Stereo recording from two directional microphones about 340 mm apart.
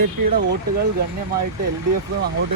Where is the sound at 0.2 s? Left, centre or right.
Right.